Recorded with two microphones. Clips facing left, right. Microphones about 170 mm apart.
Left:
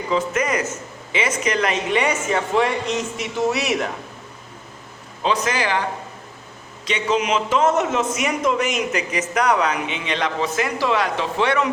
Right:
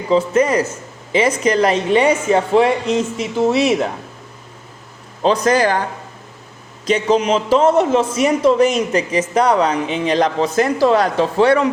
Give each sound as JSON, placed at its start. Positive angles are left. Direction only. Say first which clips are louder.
{"t": 0.1, "sound": "a man's voice", "louder": "right 7 dB", "side_deg": -30}
{"t": 5.2, "sound": "a man's voice", "louder": "right 7 dB", "side_deg": -35}
{"t": 6.8, "sound": "a man's voice", "louder": "right 6 dB", "side_deg": -40}